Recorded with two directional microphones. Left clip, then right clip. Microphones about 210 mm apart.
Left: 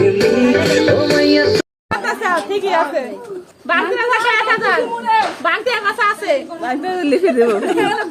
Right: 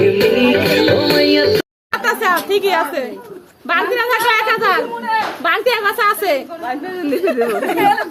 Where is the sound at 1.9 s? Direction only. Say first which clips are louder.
Right 2 dB; 55° right (ahead or behind).